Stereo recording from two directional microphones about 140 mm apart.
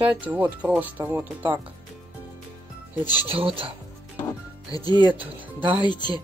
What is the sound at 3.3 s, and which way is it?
Speech, 40° right (ahead or behind).